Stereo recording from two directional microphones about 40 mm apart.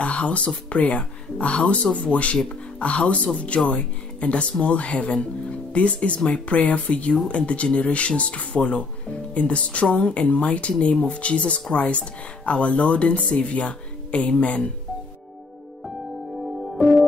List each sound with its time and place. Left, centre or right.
0.0 s speech: left
1.9 s speech: centre
2.8 s speech: left
16.7 s music: centre